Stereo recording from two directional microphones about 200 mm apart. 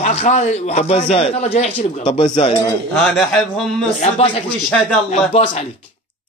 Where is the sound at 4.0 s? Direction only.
30° left (ahead or behind).